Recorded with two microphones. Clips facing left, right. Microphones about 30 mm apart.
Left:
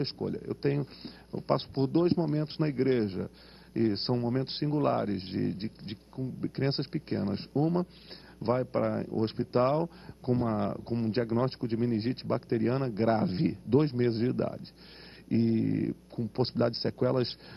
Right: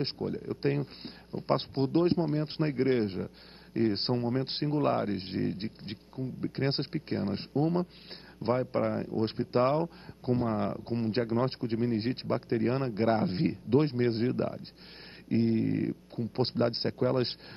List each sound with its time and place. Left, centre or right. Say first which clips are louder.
0.2 s speech: even; centre
0.6 s speech: even; right